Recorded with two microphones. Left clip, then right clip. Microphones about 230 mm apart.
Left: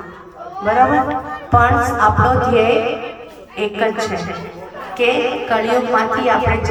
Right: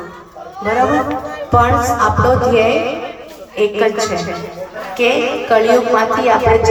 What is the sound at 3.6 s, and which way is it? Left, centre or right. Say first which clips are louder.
A woman's voice: right 4 dB; centre.